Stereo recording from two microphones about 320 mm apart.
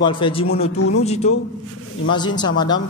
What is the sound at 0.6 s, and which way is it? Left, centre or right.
Speech, left.